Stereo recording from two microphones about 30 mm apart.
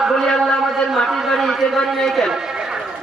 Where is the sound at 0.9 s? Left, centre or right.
Centre.